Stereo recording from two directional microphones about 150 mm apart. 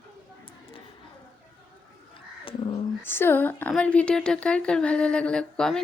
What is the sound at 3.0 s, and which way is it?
Speech, 15° left (ahead or behind).